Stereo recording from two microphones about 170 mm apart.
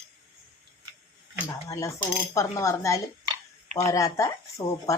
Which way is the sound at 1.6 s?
20° left (ahead or behind).